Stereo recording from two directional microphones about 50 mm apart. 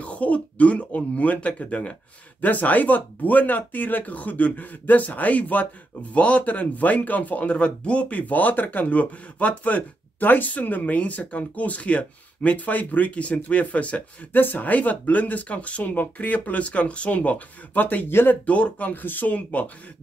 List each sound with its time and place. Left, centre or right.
0.0 s speech: left
14.3 s speech: left
18.0 s speech: left
18.3 s speech: left